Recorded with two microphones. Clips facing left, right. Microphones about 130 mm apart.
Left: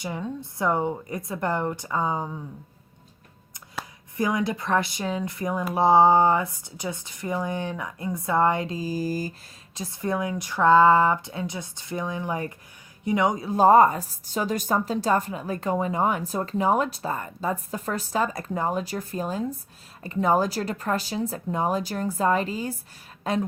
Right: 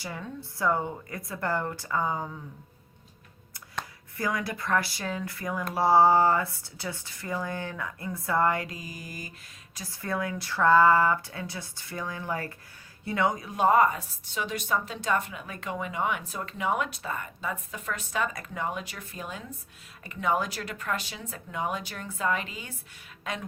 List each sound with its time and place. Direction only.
0.0 s speech: 20° left (ahead or behind)
4.2 s speech: 20° left (ahead or behind)
9.7 s speech: 25° left (ahead or behind)
13.4 s a woman's voice: 35° left (ahead or behind)